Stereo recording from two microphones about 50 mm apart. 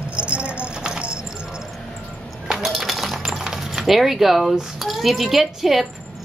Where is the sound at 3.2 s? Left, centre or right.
Centre.